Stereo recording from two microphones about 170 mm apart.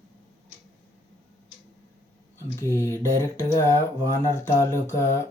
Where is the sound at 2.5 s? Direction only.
15° left (ahead or behind).